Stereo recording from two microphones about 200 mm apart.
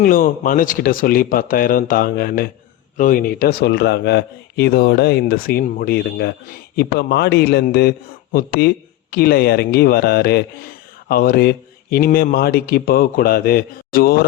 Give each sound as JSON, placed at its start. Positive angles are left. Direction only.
{"t": 0.0, "sound": "a man's voice", "side_deg": 45}